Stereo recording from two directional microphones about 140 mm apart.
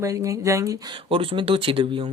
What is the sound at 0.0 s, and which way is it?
Speech, 20° right (ahead or behind).